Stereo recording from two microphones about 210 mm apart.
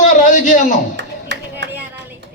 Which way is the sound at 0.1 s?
35° left (ahead or behind).